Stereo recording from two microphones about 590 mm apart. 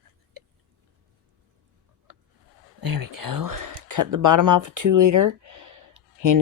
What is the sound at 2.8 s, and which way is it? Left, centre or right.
Speech, right.